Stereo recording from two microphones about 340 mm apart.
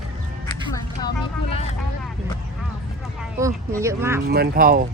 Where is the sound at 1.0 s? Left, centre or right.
Centre.